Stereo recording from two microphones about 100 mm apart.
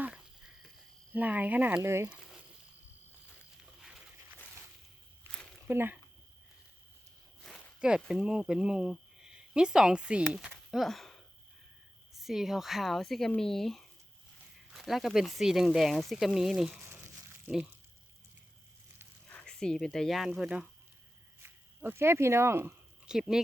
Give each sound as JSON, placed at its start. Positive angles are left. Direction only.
{"t": 0.0, "sound": "a sound", "side_deg": -10}
{"t": 1.1, "sound": "speech", "side_deg": -15}
{"t": 1.8, "sound": "speech", "side_deg": -25}
{"t": 3.8, "sound": "a sound", "side_deg": -5}
{"t": 5.6, "sound": "speech", "side_deg": -20}
{"t": 7.4, "sound": "speech", "side_deg": -5}
{"t": 19.3, "sound": "speech", "side_deg": 10}
{"t": 21.8, "sound": "speech", "side_deg": -25}
{"t": 23.0, "sound": "speech", "side_deg": -5}